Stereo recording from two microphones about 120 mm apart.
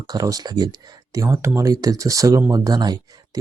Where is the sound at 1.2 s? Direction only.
25° right (ahead or behind).